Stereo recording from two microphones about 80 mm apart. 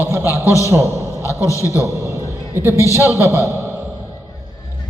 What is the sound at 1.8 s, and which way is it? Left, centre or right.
A man's voice, right.